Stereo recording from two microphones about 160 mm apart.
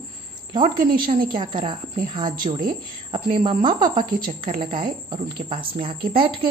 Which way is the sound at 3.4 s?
35° right (ahead or behind).